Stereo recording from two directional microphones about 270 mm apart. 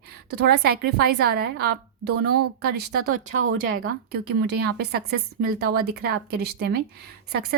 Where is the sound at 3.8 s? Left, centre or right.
Right.